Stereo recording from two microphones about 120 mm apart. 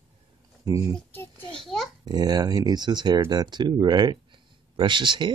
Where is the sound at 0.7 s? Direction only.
25° right (ahead or behind).